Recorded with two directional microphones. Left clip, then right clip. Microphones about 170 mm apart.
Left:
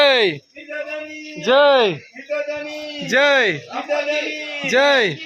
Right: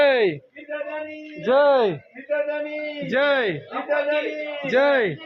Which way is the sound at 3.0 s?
15° left (ahead or behind).